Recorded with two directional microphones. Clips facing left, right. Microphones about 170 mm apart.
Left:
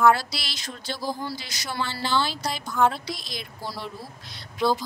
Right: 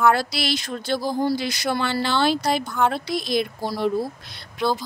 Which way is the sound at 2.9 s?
60° right (ahead or behind).